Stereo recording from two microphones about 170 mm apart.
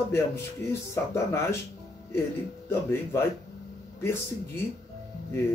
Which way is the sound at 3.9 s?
15° left (ahead or behind).